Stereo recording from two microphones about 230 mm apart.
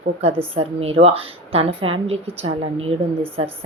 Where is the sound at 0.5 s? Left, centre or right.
Right.